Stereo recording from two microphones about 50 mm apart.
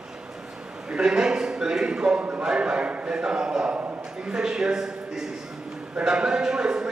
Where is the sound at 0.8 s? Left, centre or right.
Centre.